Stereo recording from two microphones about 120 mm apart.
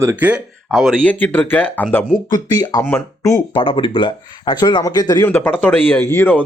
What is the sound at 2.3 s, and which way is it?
Speech, 30° left (ahead or behind).